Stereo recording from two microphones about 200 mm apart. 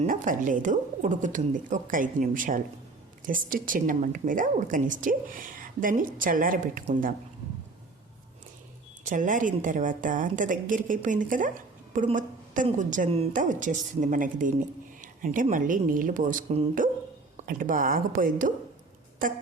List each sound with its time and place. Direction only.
0.0 s a woman's voice: 40° right (ahead or behind)
9.0 s a woman's voice: 40° right (ahead or behind)